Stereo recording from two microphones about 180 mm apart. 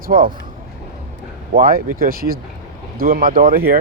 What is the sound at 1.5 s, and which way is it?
Speech, 50° right (ahead or behind).